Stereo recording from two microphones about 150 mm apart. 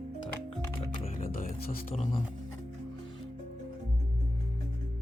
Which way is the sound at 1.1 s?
65° left (ahead or behind).